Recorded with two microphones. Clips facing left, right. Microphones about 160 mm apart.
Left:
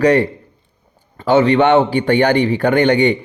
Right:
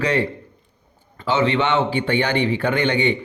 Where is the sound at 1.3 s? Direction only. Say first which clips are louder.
Left 8 dB; 45° left (ahead or behind).